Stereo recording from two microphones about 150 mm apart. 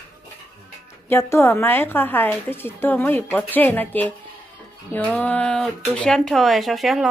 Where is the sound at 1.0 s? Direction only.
15° left (ahead or behind).